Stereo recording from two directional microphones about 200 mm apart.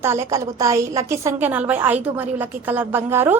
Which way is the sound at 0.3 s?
15° right (ahead or behind).